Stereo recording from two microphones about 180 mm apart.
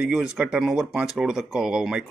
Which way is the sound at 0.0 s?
5° right (ahead or behind).